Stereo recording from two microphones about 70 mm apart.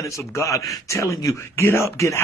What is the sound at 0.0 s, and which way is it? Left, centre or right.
A man's voice, left.